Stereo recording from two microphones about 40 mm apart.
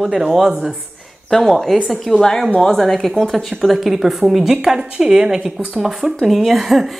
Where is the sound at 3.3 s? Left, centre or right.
Centre.